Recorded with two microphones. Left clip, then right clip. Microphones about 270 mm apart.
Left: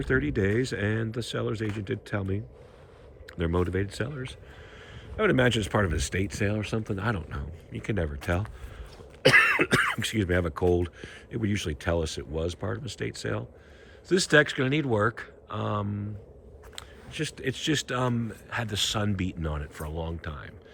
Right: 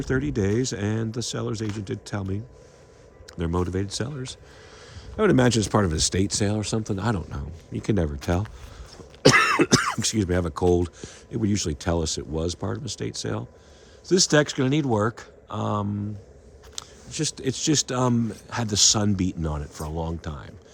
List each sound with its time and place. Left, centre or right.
0.0 s speech: centre